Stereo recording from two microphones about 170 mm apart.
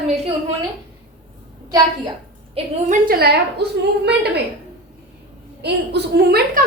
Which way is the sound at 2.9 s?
60° right (ahead or behind).